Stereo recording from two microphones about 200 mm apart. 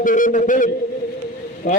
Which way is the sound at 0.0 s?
40° left (ahead or behind).